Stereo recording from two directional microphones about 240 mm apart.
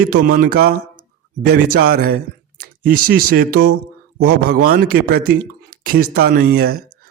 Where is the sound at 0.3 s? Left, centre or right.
Right.